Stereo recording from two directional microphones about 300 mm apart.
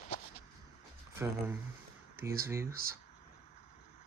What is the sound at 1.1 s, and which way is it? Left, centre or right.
Speech, centre.